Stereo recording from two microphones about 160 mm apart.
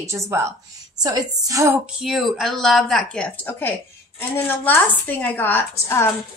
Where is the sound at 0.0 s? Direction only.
15° right (ahead or behind).